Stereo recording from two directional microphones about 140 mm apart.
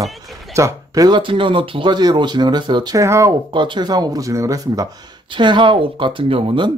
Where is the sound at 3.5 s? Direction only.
35° right (ahead or behind).